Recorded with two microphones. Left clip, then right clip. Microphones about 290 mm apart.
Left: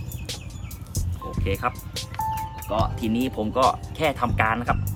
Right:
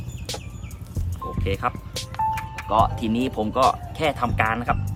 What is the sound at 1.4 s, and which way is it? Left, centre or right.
Music, centre.